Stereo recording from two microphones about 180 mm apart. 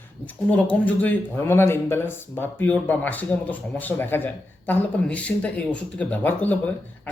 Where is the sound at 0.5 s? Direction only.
10° left (ahead or behind).